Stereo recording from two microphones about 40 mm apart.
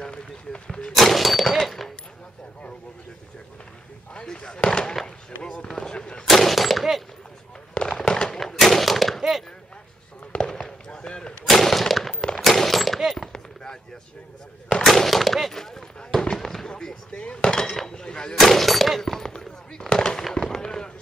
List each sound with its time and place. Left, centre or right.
0.7 s speech: centre
0.9 s a sound: centre
4.1 s speech: left
6.2 s gunshot: centre
7.7 s fireworks: left
8.4 s gunshot: centre
10.3 s fireworks: left
11.4 s gunshot: centre
12.4 s machine gun: centre
14.9 s a sound: centre
15.5 s fireworks: centre
17.2 s a sound: left
18.3 s gunshot: centre
19.9 s fireworks: centre